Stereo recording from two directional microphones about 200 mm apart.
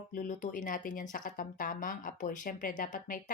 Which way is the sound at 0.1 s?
40° left (ahead or behind).